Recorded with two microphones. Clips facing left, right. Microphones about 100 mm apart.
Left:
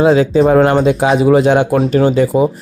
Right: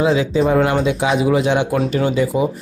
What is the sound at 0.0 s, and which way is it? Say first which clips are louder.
Speech: left 6 dB; 45° left (ahead or behind).